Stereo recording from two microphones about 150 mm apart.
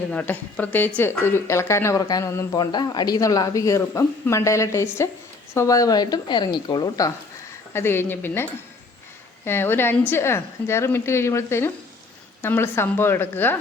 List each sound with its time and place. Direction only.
0.1 s speech: 10° left (ahead or behind)